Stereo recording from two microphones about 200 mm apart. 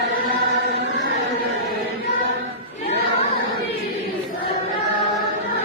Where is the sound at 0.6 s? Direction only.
60° right (ahead or behind).